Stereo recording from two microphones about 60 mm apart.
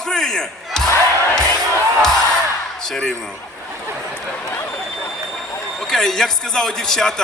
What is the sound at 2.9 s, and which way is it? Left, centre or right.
Speech, centre.